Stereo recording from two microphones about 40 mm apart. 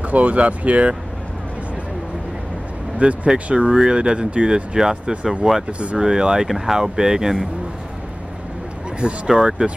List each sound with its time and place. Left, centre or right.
0.0 s speech: right
3.0 s speech: right
3.4 s speech: right
4.7 s speech: centre
5.7 s speech: right
5.9 s speech: centre
9.3 s speech: centre